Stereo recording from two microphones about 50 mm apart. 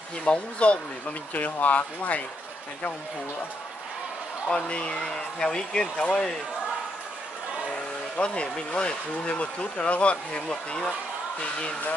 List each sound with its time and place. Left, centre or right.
0.2 s speech: left
4.5 s speech: left
8.2 s speech: left